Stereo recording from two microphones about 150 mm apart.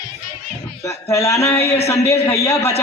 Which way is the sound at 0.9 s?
20° left (ahead or behind).